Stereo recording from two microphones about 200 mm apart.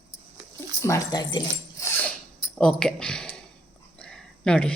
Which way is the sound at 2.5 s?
5° left (ahead or behind).